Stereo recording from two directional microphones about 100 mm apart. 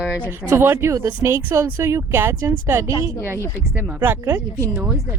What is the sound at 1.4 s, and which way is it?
Speech, 20° right (ahead or behind).